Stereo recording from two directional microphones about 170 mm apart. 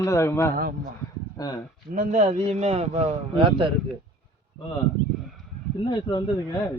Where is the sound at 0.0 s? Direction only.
15° left (ahead or behind).